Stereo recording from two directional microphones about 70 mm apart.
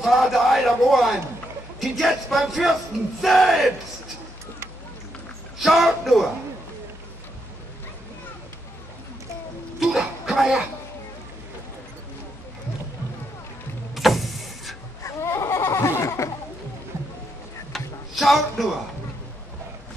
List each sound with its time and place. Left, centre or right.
0.0 s a man's voice: centre
5.6 s speech: centre
9.8 s cough: centre
13.9 s vehicle: centre
15.0 s a sound: left
17.7 s a sound: centre